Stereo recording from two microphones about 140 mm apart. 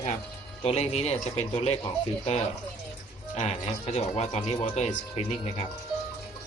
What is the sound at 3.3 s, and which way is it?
A man's voice, 50° left (ahead or behind).